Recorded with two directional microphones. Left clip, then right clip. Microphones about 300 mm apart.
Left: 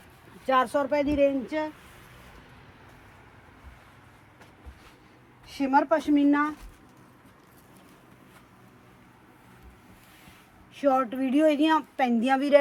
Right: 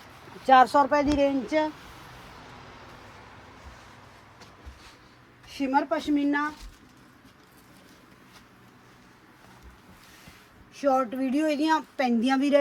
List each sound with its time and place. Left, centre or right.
0.4 s speech: centre
5.5 s speech: centre
10.8 s speech: centre